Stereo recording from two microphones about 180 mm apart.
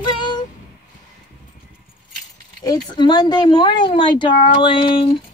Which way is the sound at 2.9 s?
25° left (ahead or behind).